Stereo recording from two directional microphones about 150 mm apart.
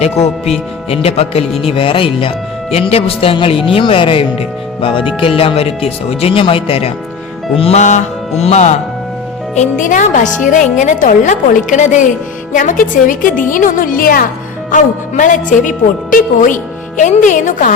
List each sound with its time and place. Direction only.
0.0 s music: 45° left (ahead or behind)
0.9 s speech: 40° left (ahead or behind)
7.5 s music: 40° left (ahead or behind)
9.6 s a woman's voice: 60° left (ahead or behind); by 14.3 s 75° left (ahead or behind)
14.7 s a woman's voice: 55° left (ahead or behind)